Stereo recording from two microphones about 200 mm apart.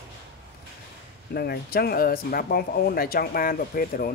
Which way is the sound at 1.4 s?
50° left (ahead or behind).